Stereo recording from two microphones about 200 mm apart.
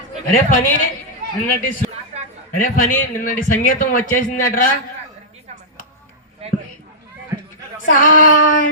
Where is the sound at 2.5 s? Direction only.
40° left (ahead or behind).